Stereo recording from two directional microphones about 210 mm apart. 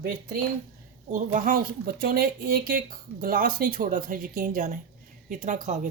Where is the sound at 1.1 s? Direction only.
40° right (ahead or behind).